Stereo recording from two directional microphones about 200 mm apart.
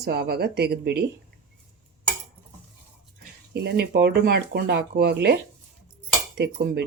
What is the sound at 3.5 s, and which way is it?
Speech, 55° right (ahead or behind).